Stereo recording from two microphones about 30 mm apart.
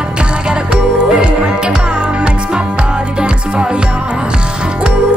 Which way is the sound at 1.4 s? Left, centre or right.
Right.